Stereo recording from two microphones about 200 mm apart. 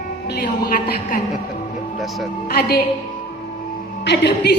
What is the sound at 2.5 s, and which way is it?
Speech, 50° left (ahead or behind).